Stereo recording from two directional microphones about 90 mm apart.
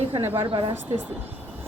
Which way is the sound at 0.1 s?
25° right (ahead or behind).